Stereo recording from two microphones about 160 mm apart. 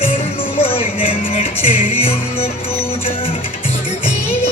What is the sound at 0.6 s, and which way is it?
Music, 35° left (ahead or behind).